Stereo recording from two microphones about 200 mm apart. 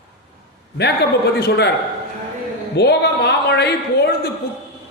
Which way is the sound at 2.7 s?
55° left (ahead or behind).